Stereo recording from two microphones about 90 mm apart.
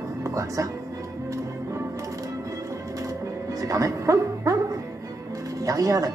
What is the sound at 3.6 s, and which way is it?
Speech, 40° right (ahead or behind).